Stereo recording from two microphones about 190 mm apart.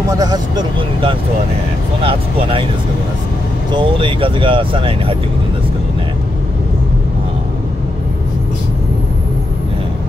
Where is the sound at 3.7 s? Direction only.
25° right (ahead or behind).